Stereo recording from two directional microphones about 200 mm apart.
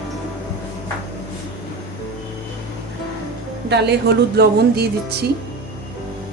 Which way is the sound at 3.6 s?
55° right (ahead or behind).